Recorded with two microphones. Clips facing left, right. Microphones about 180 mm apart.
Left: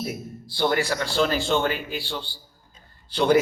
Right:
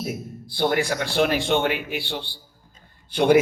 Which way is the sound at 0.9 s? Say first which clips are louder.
Right 2 dB; 60° right (ahead or behind).